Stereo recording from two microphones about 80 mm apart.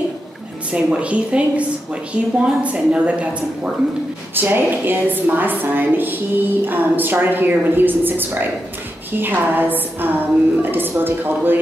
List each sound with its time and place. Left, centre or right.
0.7 s a woman's voice: centre
4.4 s a woman's voice: right